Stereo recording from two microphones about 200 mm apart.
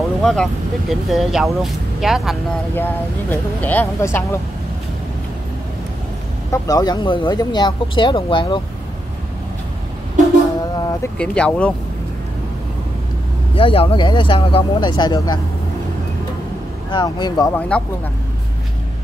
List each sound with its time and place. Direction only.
0.2 s speech: centre (ahead or behind)
2.7 s speech: 10° left (ahead or behind)
6.5 s speech: 20° left (ahead or behind)
10.8 s speech: 15° left (ahead or behind)
11.1 s speech: 5° left (ahead or behind)
13.6 s speech: 25° left (ahead or behind)
16.9 s speech: 20° left (ahead or behind)
17.6 s speech: 5° left (ahead or behind)